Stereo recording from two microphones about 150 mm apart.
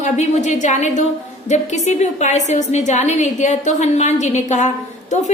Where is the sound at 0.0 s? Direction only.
50° left (ahead or behind).